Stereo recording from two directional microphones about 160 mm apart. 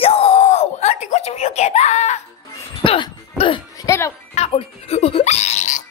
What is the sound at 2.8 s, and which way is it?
Music, 35° left (ahead or behind).